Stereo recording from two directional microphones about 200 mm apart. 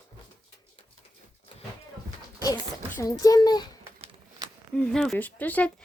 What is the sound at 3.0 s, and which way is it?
Speech, 20° left (ahead or behind).